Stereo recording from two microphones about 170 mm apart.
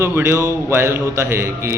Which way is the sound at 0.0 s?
15° right (ahead or behind).